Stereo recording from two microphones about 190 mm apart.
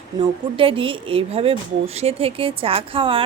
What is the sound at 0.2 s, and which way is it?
A woman's voice, 30° right (ahead or behind).